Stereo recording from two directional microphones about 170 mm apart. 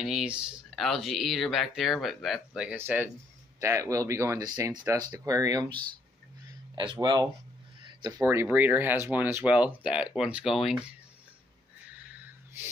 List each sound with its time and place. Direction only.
0.0 s speech: 5° right (ahead or behind); by 7.2 s 25° right (ahead or behind)
8.3 s speech: 15° right (ahead or behind)